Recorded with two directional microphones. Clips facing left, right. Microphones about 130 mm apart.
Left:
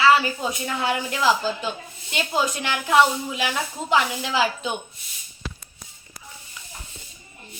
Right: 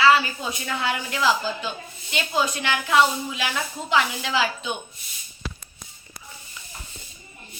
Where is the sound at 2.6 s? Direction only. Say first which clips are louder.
Left 2 dB; 45° left (ahead or behind).